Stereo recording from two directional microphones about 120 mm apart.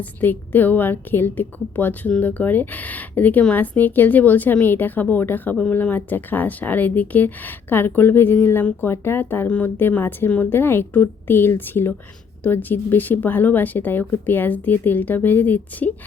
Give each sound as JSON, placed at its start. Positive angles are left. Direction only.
{"t": 0.0, "sound": "a woman's voice", "side_deg": 15}